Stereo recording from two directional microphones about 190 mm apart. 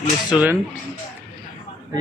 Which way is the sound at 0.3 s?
5° right (ahead or behind).